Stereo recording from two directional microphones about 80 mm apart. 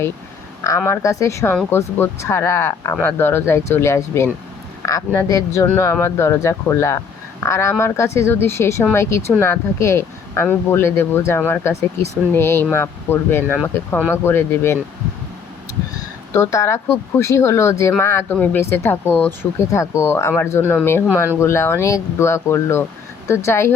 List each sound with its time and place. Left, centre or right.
0.9 s speech: left
16.3 s speech: left
18.3 s speech: left
19.4 s speech: left